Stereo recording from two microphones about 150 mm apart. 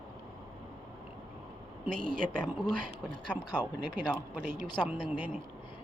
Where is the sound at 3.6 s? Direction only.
30° left (ahead or behind).